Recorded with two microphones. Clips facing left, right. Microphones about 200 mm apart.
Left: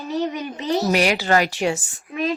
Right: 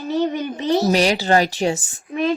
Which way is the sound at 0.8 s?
35° right (ahead or behind).